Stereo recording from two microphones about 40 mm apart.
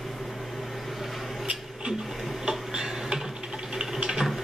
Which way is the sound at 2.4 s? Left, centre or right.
Centre.